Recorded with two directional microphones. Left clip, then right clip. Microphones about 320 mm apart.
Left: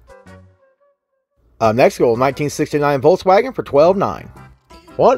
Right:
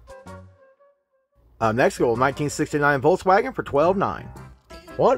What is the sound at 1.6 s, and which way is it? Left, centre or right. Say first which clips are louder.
Speech: left 7 dB; centre.